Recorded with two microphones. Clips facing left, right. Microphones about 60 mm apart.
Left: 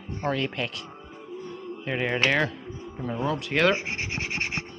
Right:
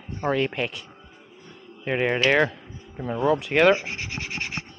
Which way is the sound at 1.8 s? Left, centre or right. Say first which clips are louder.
Right 3 dB; centre.